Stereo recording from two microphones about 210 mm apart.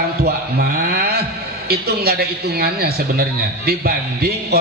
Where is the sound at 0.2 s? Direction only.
45° right (ahead or behind).